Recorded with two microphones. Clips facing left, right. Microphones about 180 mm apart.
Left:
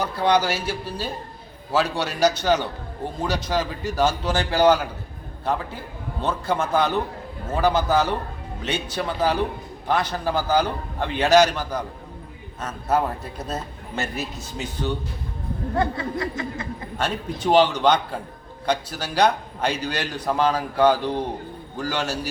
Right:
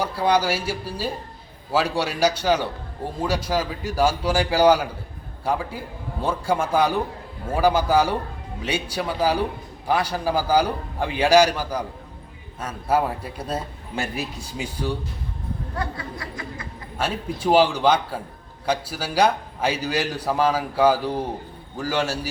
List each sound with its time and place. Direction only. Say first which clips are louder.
0.0 s a man's voice: even; 10° right (ahead or behind)
15.8 s snicker: left 9 dB; 25° left (ahead or behind)
17.0 s a man's voice: right 1 dB; 5° right (ahead or behind)